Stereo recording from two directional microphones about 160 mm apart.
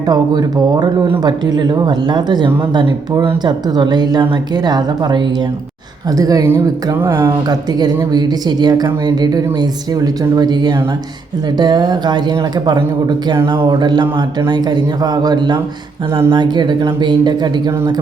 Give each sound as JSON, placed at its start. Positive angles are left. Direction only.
{"t": 0.0, "sound": "speech", "side_deg": -25}